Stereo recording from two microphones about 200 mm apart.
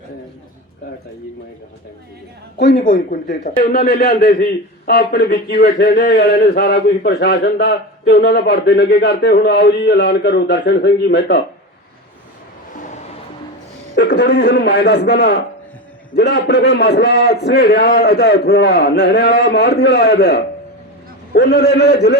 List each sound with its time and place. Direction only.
2.6 s a man's voice: 55° left (ahead or behind)
3.1 s speech: 40° left (ahead or behind)
3.6 s a man's voice: 50° left (ahead or behind)
13.9 s a man's voice: 50° left (ahead or behind)